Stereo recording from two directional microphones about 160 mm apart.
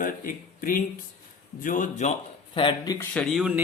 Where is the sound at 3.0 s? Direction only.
5° left (ahead or behind).